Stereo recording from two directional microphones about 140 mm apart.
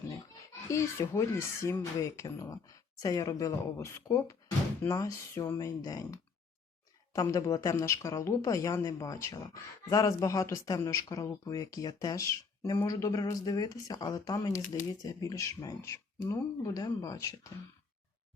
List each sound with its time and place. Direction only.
0.7 s speech: 20° left (ahead or behind)